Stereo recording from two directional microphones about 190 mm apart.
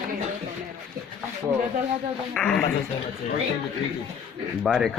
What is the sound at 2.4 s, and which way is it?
Speech, 5° left (ahead or behind).